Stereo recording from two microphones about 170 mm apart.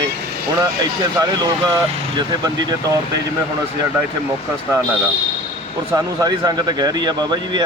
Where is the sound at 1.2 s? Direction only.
25° right (ahead or behind).